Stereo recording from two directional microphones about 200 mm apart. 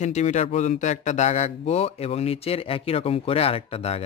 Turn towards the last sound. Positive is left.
turn(degrees=30)  # may be behind; listen again after turning